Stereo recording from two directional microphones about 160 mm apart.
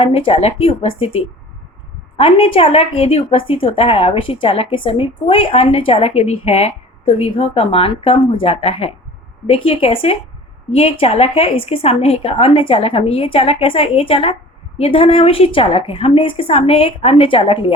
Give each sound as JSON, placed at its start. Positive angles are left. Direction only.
{"t": 0.0, "sound": "speech", "side_deg": 35}